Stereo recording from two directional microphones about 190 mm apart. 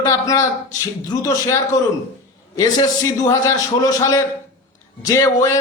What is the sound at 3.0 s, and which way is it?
A man's voice, 15° left (ahead or behind).